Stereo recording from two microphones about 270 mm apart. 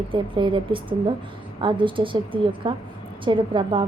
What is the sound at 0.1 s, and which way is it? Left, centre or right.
A woman's voice, centre.